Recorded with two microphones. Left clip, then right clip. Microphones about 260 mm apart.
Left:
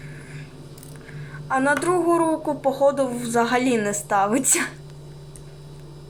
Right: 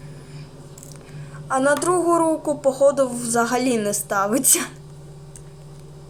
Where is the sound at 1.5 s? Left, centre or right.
Centre.